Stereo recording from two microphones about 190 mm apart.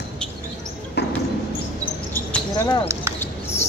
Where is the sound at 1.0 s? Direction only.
60° left (ahead or behind).